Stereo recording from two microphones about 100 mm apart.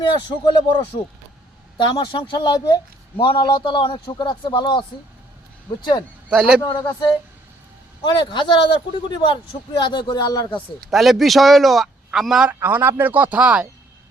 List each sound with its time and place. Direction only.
0.0 s speech: 50° left (ahead or behind)
1.8 s speech: 50° left (ahead or behind)
6.3 s speech: 10° right (ahead or behind)
6.7 s speech: 45° left (ahead or behind)
10.9 s a man's voice: centre (ahead or behind)
12.5 s speech: 25° right (ahead or behind)